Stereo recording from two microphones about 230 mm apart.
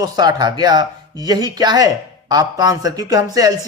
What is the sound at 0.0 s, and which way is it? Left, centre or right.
Speech, centre.